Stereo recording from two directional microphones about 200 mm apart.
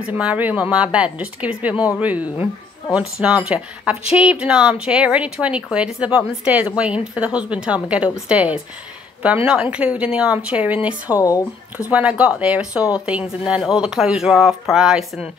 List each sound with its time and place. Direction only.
0.0 s a woman's voice: 5° right (ahead or behind)
11.1 s speech: 15° left (ahead or behind)
11.9 s speech: 5° right (ahead or behind)